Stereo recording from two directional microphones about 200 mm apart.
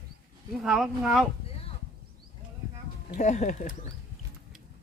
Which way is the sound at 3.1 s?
35° left (ahead or behind).